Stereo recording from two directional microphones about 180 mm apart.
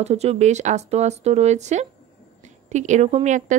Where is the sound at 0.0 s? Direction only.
35° right (ahead or behind).